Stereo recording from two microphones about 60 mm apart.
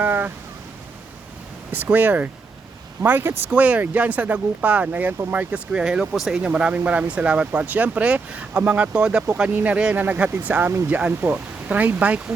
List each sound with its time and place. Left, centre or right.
0.0 s a sound: right
1.7 s speech: right
3.6 s speech: right
9.5 s speech: right